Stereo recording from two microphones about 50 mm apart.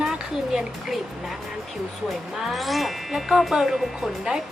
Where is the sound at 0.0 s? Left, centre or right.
Centre.